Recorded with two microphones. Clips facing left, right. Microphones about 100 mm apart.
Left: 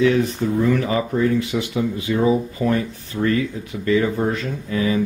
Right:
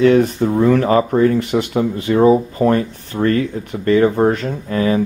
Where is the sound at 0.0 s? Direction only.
50° right (ahead or behind).